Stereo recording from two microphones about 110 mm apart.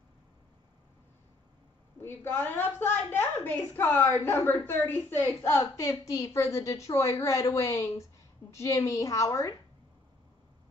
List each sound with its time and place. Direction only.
2.0 s a woman's voice: 20° left (ahead or behind)